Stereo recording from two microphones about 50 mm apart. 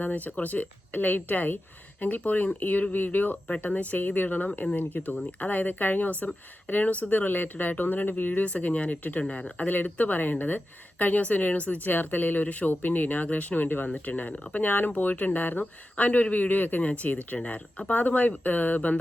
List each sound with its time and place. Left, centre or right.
0.0 s speech: left
8.4 s speech: left
11.9 s speech: left